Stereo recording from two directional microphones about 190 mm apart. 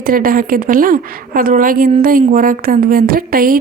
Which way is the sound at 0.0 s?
50° right (ahead or behind).